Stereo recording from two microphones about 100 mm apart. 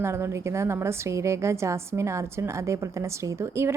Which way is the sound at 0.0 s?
25° right (ahead or behind).